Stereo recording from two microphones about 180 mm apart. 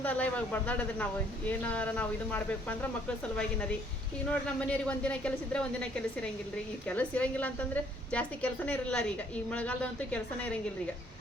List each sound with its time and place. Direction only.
0.0 s a woman's voice: 10° left (ahead or behind)